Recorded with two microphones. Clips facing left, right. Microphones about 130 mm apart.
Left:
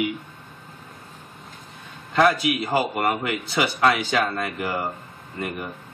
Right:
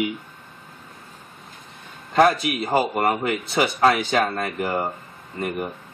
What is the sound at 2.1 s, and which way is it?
A man's voice, 35° right (ahead or behind).